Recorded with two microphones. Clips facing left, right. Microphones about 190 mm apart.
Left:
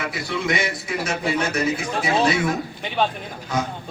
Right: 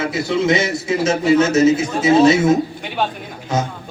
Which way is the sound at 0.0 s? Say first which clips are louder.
Right 8 dB; 25° right (ahead or behind).